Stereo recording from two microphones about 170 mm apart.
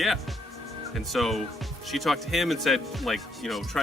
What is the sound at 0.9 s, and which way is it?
Speech, centre (ahead or behind).